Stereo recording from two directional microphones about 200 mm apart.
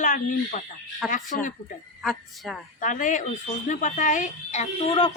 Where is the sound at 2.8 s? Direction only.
40° left (ahead or behind).